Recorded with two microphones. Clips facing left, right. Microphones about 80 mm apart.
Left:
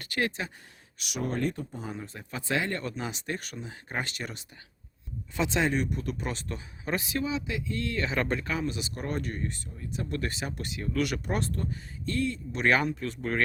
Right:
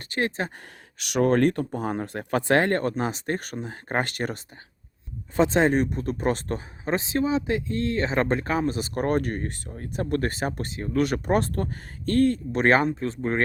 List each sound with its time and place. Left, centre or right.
0.0 s speech: right
0.9 s speech: right
6.9 s speech: right